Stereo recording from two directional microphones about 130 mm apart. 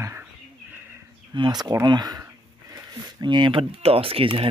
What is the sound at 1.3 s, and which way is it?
Speech, 35° right (ahead or behind).